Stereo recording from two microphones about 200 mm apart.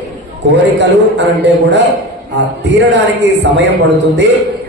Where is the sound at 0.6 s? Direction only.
60° right (ahead or behind).